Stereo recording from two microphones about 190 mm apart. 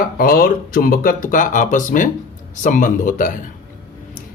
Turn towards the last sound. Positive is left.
turn(degrees=45)  # may be behind; listen again after turning